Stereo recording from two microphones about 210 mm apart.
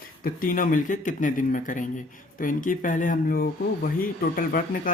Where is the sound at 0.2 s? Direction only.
40° left (ahead or behind).